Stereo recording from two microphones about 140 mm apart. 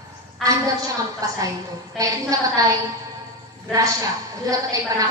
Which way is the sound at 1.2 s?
25° right (ahead or behind).